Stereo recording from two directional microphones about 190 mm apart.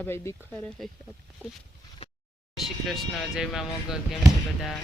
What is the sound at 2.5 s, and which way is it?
Vehicle, centre (ahead or behind).